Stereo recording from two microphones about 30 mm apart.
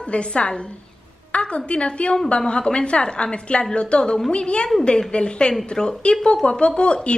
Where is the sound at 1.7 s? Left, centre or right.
Left.